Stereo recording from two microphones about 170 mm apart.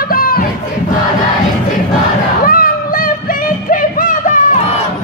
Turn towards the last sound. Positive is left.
turn(degrees=50)  # may be behind; listen again after turning